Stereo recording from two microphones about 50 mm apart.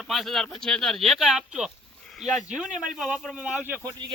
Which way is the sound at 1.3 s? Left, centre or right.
Centre.